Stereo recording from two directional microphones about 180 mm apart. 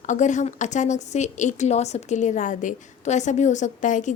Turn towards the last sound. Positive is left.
turn(degrees=45)  # may be behind; listen again after turning